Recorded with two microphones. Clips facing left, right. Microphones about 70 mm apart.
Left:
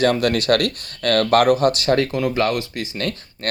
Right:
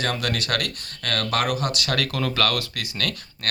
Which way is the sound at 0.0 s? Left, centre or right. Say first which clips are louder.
Left 9 dB; left.